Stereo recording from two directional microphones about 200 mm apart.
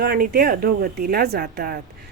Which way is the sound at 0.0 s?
50° right (ahead or behind).